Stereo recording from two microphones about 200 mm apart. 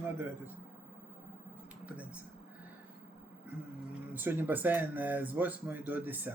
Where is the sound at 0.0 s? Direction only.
10° right (ahead or behind).